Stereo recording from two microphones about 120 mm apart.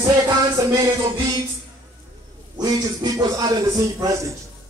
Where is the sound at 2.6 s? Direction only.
35° right (ahead or behind).